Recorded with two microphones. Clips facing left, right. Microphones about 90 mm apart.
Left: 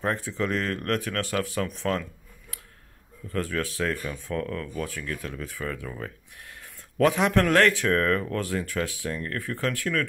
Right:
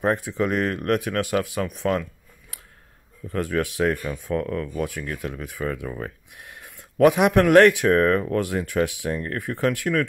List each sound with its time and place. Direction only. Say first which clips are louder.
0.0 s speech: right 5 dB; 15° right (ahead or behind)
3.3 s speech: right 4 dB; 20° right (ahead or behind)